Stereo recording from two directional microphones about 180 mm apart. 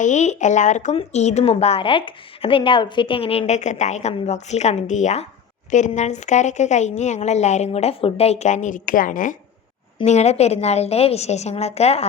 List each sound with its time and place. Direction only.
0.0 s speech: 40° left (ahead or behind)
10.0 s speech: 35° left (ahead or behind)